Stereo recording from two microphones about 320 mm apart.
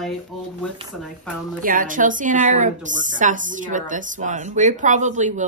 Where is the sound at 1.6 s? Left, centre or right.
Right.